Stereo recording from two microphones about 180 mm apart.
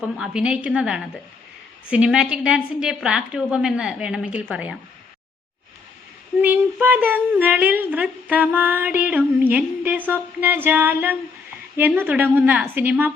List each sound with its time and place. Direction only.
0.0 s a woman's voice: 5° right (ahead or behind)
6.4 s speech: 10° right (ahead or behind)